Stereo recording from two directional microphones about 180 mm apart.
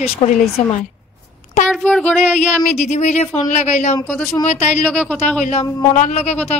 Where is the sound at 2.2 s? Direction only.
40° left (ahead or behind).